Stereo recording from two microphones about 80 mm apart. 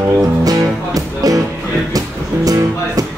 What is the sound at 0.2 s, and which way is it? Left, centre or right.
Music, right.